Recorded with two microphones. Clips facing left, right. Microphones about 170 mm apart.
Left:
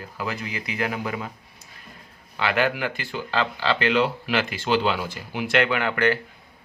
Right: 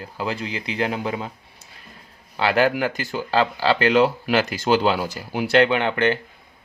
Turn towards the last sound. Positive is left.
turn(degrees=-25)  # may be behind; listen again after turning